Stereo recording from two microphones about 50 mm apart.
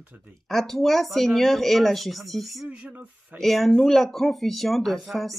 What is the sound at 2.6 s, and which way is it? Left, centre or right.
Speech, right.